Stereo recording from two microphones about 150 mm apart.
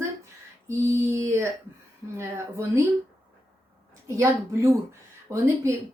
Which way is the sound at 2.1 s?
20° right (ahead or behind).